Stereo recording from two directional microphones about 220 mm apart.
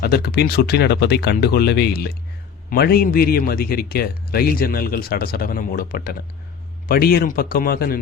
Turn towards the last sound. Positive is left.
turn(degrees=40)  # may be behind; listen again after turning